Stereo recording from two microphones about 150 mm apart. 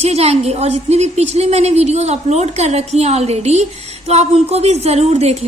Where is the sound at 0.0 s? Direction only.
45° right (ahead or behind).